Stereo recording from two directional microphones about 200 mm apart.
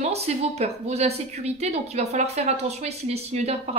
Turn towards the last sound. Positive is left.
turn(degrees=-30)  # may be behind; listen again after turning